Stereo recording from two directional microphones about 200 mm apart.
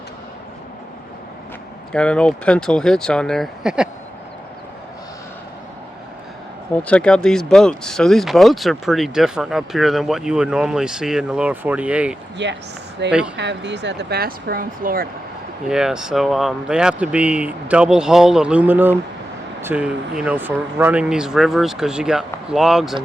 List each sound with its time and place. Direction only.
1.9 s speech: 5° left (ahead or behind)
6.8 s speech: 5° left (ahead or behind)
12.4 s speech: 60° right (ahead or behind)
13.1 s speech: 5° right (ahead or behind)
13.3 s speech: 60° right (ahead or behind); by 15.0 s 45° right (ahead or behind)
15.7 s speech: 5° right (ahead or behind)